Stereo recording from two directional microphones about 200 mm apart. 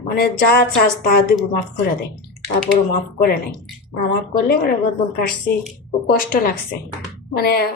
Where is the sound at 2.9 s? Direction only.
45° left (ahead or behind).